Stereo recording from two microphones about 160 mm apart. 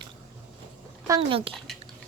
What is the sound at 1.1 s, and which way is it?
Speech, 30° right (ahead or behind).